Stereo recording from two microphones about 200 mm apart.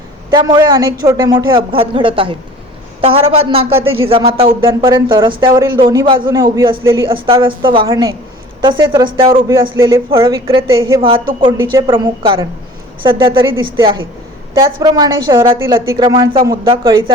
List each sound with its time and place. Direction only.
0.3 s speech: 20° right (ahead or behind)
3.8 s speech: 90° right
4.1 s speech: 25° right (ahead or behind)
10.7 s a woman's voice: 15° right (ahead or behind)
11.0 s speech: 25° right (ahead or behind)